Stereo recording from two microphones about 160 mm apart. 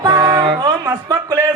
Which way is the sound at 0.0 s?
25° right (ahead or behind).